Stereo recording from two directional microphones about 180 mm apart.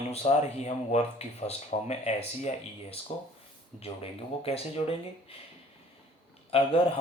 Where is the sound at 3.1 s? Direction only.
35° left (ahead or behind).